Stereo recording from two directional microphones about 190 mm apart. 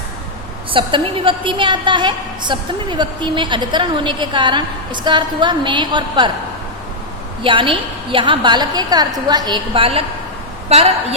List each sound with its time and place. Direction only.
0.7 s a woman's voice: 25° right (ahead or behind)
7.4 s a woman's voice: 25° right (ahead or behind)